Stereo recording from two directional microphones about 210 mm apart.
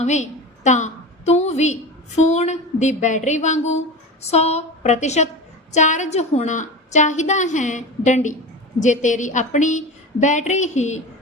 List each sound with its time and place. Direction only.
0.0 s a woman's voice: 35° left (ahead or behind)